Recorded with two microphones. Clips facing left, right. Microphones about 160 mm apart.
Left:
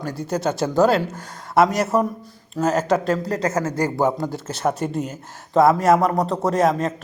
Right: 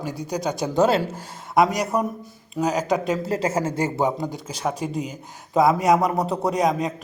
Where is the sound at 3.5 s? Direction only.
30° right (ahead or behind).